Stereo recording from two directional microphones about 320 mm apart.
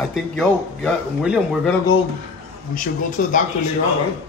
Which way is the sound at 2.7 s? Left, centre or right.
Left.